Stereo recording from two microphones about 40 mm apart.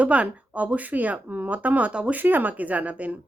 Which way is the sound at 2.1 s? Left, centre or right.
Right.